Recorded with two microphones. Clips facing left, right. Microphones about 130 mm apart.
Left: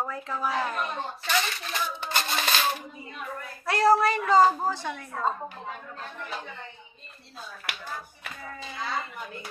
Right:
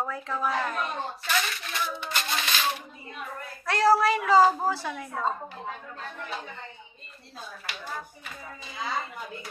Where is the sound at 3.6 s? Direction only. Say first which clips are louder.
Even; centre (ahead or behind).